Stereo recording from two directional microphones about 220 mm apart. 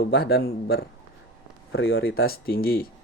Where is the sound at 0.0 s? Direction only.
45° left (ahead or behind).